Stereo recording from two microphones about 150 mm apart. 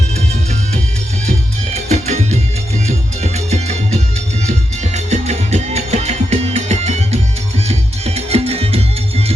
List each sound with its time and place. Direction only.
1.7 s music: 50° right (ahead or behind)